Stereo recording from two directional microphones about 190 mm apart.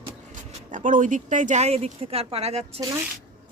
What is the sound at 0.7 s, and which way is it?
A woman's voice, 45° right (ahead or behind).